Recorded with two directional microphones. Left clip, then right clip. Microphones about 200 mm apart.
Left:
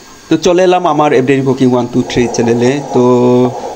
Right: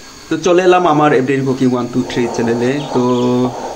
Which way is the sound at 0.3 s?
20° left (ahead or behind).